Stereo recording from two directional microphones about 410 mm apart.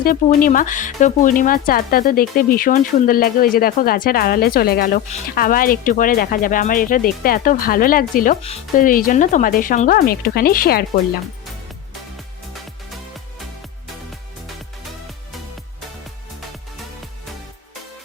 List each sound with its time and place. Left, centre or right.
0.0 s speech: centre